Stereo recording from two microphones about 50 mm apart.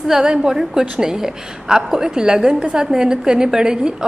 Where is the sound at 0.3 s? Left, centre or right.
Centre.